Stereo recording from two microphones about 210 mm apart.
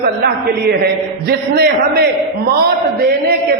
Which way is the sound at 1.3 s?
50° right (ahead or behind).